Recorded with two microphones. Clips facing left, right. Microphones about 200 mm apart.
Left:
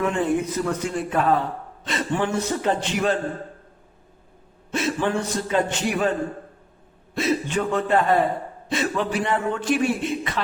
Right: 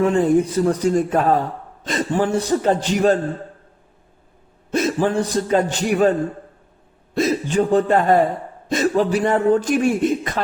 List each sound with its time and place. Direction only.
0.0 s a man's voice: 35° right (ahead or behind)
4.7 s a man's voice: 40° right (ahead or behind)
7.2 s a man's voice: 35° right (ahead or behind)